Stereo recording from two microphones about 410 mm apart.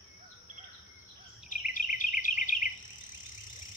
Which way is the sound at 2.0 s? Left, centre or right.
Centre.